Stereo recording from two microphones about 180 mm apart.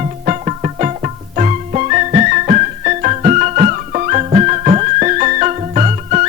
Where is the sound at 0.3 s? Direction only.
40° right (ahead or behind).